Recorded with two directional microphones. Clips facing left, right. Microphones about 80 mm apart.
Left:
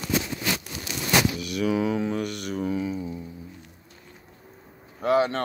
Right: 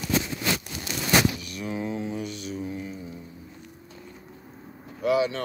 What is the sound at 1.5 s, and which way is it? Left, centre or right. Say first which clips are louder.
Mantra: left 7 dB; left.